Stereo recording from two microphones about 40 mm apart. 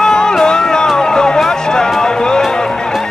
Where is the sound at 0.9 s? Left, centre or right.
Centre.